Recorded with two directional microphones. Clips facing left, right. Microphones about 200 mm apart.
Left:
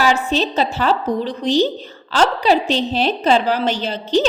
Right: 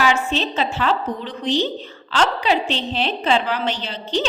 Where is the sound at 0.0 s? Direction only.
35° left (ahead or behind).